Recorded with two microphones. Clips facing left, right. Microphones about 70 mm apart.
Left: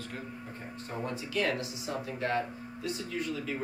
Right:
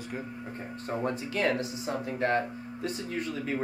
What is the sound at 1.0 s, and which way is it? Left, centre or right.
Speech, right.